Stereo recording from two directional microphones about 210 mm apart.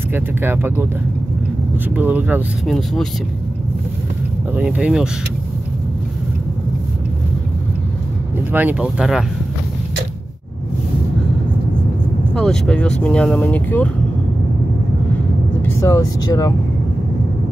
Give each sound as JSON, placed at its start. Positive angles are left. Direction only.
{"t": 0.1, "sound": "speech", "side_deg": -10}
{"t": 2.0, "sound": "speech", "side_deg": -10}
{"t": 4.6, "sound": "speech", "side_deg": -5}
{"t": 8.5, "sound": "speech", "side_deg": -10}
{"t": 12.4, "sound": "speech", "side_deg": 5}
{"t": 15.6, "sound": "speech", "side_deg": 15}